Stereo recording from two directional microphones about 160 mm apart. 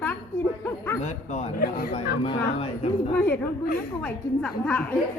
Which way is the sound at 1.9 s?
40° left (ahead or behind).